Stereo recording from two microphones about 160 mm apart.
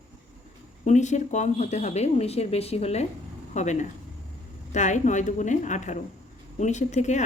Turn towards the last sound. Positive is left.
turn(degrees=45)  # may be behind; listen again after turning